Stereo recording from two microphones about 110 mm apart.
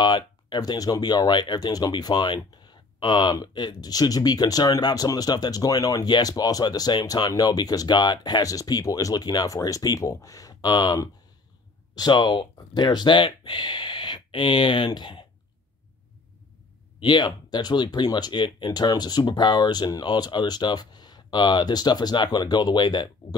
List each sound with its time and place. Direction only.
0.0 s speech: 40° left (ahead or behind)
17.0 s speech: 45° left (ahead or behind)